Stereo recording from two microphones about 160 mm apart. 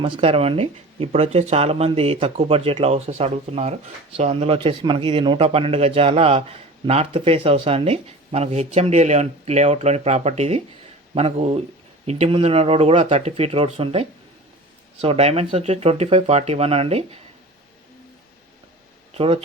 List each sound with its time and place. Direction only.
0.0 s speech: 35° right (ahead or behind)
19.1 s speech: 35° right (ahead or behind)